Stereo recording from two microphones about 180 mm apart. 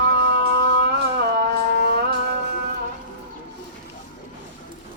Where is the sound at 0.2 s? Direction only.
70° right (ahead or behind).